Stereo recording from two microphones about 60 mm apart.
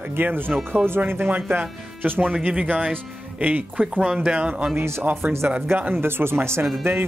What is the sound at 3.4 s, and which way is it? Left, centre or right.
Speech, right.